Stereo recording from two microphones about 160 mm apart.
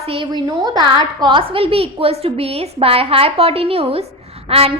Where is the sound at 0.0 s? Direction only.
35° right (ahead or behind).